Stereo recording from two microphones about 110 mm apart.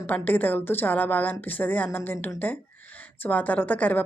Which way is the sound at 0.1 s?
15° left (ahead or behind).